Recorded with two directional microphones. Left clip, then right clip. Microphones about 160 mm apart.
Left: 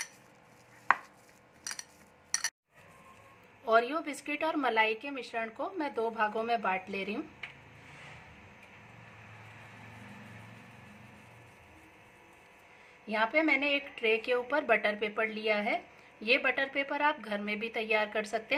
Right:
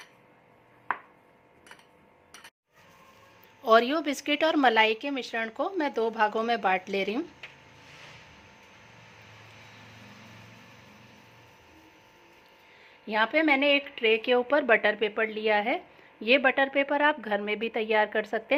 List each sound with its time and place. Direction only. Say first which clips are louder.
3.6 s a woman's voice: right 6 dB; 50° right (ahead or behind)
13.1 s a woman's voice: right 4 dB; 40° right (ahead or behind)